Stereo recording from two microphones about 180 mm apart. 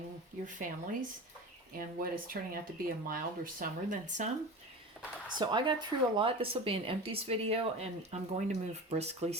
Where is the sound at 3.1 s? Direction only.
50° right (ahead or behind).